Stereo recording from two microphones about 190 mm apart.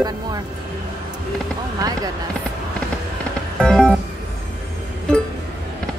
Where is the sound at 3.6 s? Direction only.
5° left (ahead or behind).